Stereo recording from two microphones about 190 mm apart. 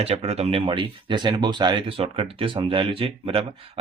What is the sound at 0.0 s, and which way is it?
Speech, 35° right (ahead or behind).